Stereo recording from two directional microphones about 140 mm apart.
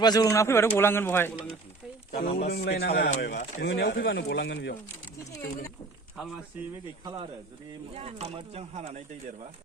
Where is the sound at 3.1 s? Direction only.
65° left (ahead or behind).